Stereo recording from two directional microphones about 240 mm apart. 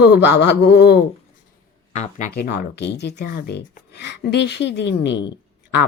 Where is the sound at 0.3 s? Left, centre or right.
Left.